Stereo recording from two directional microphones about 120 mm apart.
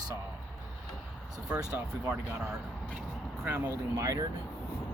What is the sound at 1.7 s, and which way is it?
Speech, 10° right (ahead or behind).